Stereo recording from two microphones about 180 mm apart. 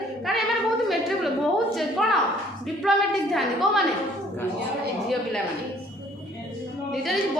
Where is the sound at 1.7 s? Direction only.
Centre (ahead or behind).